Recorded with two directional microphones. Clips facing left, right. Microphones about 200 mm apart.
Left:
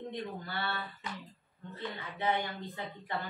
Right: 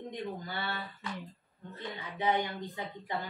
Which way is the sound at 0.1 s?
15° right (ahead or behind).